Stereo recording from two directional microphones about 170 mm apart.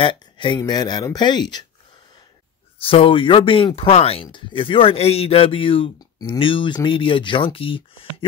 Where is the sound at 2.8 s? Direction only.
30° left (ahead or behind).